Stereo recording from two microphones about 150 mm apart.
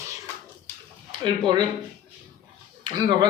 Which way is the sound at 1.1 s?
30° right (ahead or behind).